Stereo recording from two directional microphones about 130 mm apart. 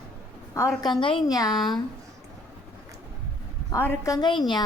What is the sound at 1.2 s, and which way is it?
Speech, 30° left (ahead or behind).